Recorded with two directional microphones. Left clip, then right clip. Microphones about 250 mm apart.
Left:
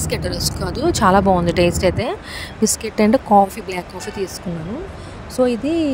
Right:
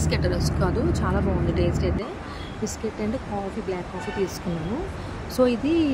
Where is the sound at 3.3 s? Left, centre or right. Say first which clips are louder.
Left 19 dB; left.